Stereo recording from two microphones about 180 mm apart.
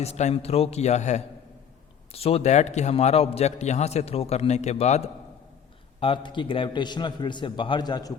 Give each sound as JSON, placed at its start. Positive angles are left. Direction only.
{"t": 0.0, "sound": "a man's voice", "side_deg": 35}